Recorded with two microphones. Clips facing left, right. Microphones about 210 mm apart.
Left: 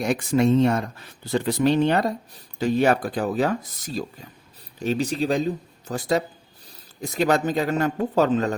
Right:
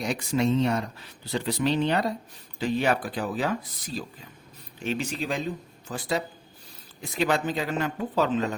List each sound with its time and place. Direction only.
0.0 s speech: 50° left (ahead or behind)